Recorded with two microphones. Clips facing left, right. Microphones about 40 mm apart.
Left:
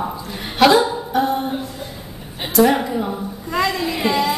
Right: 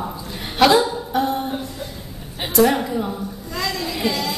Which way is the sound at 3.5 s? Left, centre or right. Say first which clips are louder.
Left 6 dB; left.